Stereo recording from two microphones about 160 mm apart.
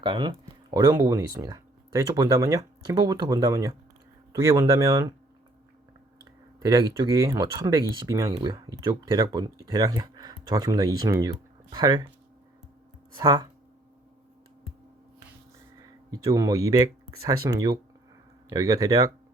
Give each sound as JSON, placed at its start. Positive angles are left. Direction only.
{"t": 0.0, "sound": "speech", "side_deg": -30}
{"t": 6.6, "sound": "speech", "side_deg": -25}
{"t": 13.1, "sound": "speech", "side_deg": -25}
{"t": 15.8, "sound": "speech", "side_deg": -20}